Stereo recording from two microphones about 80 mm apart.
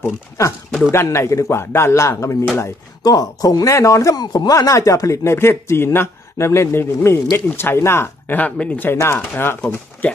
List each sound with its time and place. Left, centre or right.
0.9 s speech: left
3.0 s speech: left
4.2 s chopping: left
4.6 s speech: left
9.6 s speech: centre